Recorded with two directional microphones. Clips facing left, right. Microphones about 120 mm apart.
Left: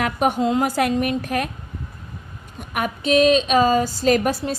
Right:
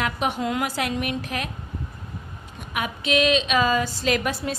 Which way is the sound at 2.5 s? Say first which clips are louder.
Left 4 dB; 45° left (ahead or behind).